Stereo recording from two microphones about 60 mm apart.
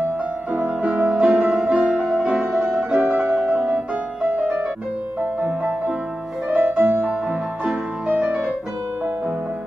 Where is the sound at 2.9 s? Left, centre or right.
Right.